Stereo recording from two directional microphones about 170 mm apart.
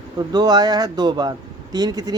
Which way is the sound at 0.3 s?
25° right (ahead or behind).